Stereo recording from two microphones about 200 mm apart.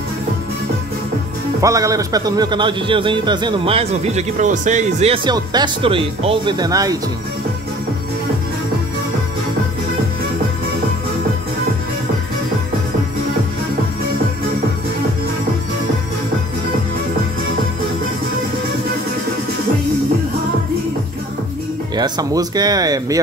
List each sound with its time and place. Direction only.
1.6 s a man's voice: 15° right (ahead or behind)
21.9 s a man's voice: 20° right (ahead or behind)